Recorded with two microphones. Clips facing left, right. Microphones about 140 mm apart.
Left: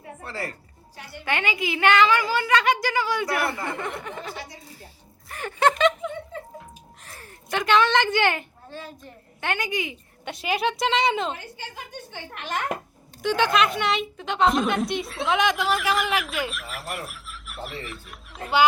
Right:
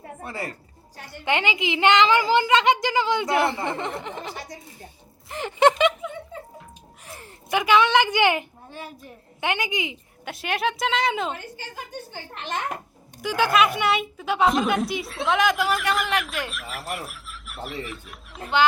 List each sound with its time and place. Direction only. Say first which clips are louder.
0.2 s a woman's voice: even; 15° right (ahead or behind)
7.0 s a sound: right 6 dB; 15° right (ahead or behind)
7.6 s a woman's voice: right 1 dB; 10° right (ahead or behind)
10.2 s a woman's voice: left 1 dB; centre (ahead or behind)
11.5 s a woman's voice: right 2 dB; 35° right (ahead or behind)
13.2 s a woman's voice: right 1 dB; 10° right (ahead or behind)